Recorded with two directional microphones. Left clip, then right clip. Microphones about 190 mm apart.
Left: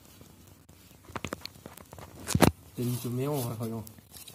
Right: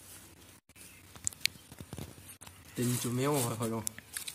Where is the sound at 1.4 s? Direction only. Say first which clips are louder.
Right 11 dB; centre (ahead or behind).